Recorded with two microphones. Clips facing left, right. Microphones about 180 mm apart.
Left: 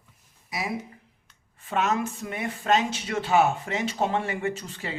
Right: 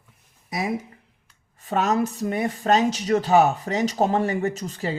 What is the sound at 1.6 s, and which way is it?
Speech, 40° right (ahead or behind).